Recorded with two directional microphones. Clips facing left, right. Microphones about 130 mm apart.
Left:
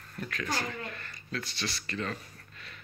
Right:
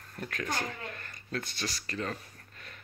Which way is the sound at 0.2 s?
45° right (ahead or behind).